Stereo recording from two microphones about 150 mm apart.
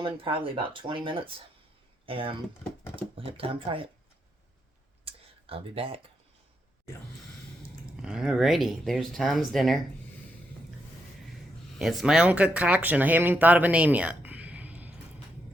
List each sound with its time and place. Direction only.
0.0 s speech: 35° right (ahead or behind)
5.0 s a sound: 40° right (ahead or behind)
8.0 s speech: 5° right (ahead or behind)
11.8 s speech: centre (ahead or behind)